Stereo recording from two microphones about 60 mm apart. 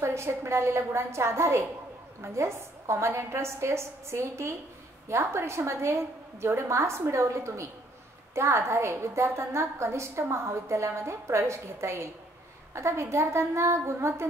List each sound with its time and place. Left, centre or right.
0.0 s a woman's voice: right